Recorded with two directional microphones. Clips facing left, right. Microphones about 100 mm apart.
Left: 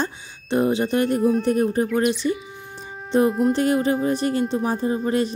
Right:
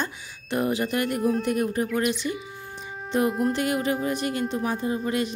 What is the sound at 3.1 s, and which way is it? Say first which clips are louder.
Speech: left 5 dB; 35° left (ahead or behind).